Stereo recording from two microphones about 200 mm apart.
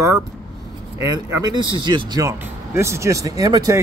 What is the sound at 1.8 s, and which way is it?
Speech, 25° right (ahead or behind).